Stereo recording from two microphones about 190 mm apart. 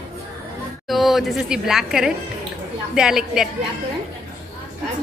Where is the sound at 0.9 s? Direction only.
Centre (ahead or behind).